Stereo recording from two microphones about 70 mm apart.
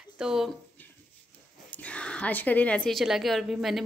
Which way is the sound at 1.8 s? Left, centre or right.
Centre.